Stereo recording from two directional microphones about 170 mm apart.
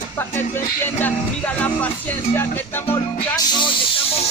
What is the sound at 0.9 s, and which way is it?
Music, 10° left (ahead or behind).